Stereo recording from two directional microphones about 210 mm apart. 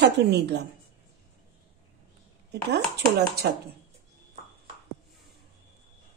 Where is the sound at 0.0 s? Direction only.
55° right (ahead or behind).